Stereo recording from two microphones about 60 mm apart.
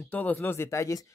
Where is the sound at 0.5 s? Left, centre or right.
Left.